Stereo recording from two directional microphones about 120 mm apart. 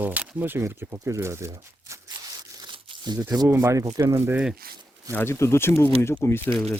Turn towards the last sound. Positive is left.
turn(degrees=20)  # may be behind; listen again after turning